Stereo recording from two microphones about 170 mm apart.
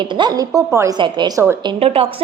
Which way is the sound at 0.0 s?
25° right (ahead or behind).